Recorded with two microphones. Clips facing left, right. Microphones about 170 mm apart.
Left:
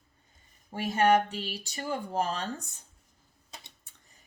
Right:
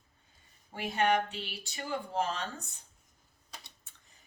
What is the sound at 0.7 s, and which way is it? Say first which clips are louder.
Speech: left 5 dB; 40° left (ahead or behind).